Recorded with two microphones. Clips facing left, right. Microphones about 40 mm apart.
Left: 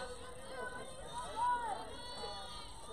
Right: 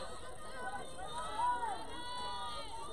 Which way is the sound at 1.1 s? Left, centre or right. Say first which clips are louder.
Right 2 dB; right.